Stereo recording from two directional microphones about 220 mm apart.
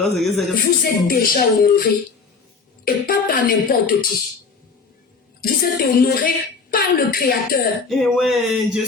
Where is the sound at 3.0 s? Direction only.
40° left (ahead or behind).